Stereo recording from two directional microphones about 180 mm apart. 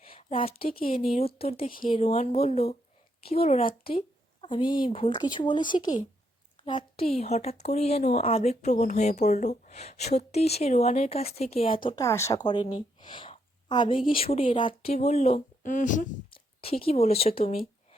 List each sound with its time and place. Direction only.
0.0 s a sound: 30° left (ahead or behind)
1.4 s a woman's voice: 35° left (ahead or behind)
7.1 s speech: 35° left (ahead or behind)
12.0 s speech: 15° left (ahead or behind)
13.0 s a sound: 25° left (ahead or behind)
14.1 s speech: 30° left (ahead or behind)
16.3 s speech: 30° left (ahead or behind)